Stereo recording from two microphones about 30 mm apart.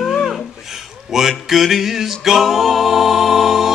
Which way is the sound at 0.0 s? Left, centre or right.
Centre.